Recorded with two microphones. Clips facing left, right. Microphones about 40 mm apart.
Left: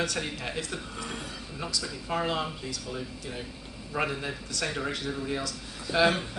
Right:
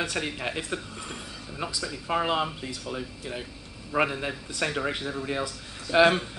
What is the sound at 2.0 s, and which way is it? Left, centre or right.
A man's voice, centre.